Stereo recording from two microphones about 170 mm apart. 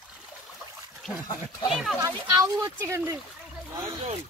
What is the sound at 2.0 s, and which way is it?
Speech, 20° right (ahead or behind).